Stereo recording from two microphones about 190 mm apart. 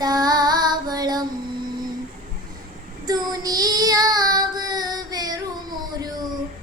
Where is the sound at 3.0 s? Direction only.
20° right (ahead or behind).